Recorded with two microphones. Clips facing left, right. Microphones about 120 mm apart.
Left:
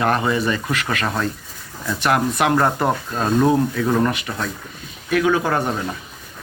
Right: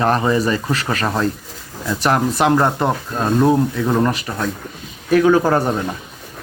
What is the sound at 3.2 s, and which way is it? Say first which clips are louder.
Speech: right 2 dB; 10° right (ahead or behind).